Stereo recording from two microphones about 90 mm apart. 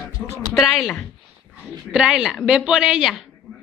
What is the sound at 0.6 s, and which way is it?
Speech, 5° left (ahead or behind).